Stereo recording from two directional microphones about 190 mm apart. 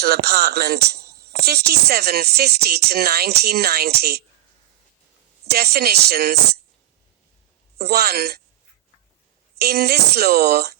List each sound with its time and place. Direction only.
0.0 s speech: 55° right (ahead or behind)
5.5 s speech: 55° right (ahead or behind)
7.8 s speech: 55° right (ahead or behind)
9.6 s speech: 55° right (ahead or behind)